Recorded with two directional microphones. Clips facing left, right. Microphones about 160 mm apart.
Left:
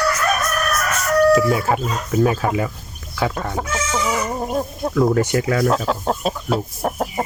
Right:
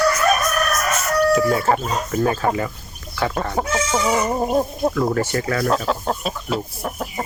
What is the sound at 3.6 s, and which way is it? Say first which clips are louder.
Chicken: right 2 dB; 35° right (ahead or behind).